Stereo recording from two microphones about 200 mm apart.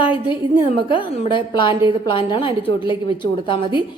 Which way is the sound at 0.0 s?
25° left (ahead or behind).